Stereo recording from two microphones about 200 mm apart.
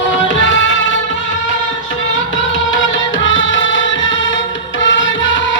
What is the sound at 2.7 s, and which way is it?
Music, 70° left (ahead or behind).